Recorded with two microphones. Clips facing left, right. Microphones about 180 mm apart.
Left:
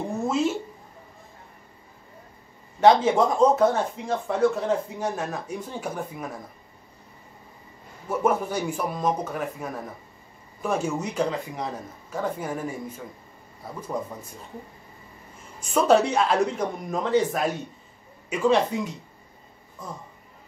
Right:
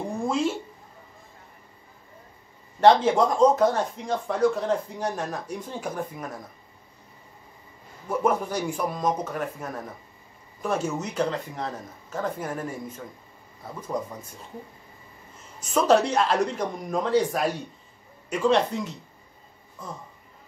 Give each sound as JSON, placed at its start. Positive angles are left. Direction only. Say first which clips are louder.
{"t": 0.1, "sound": "a sound", "louder": "left 1 dB", "side_deg": 5}
{"t": 2.8, "sound": "speech", "louder": "even", "side_deg": 5}
{"t": 8.1, "sound": "speech", "louder": "left 1 dB", "side_deg": 5}
{"t": 13.9, "sound": "speech", "louder": "right 1 dB", "side_deg": 5}
{"t": 15.7, "sound": "speech", "louder": "left 1 dB", "side_deg": 10}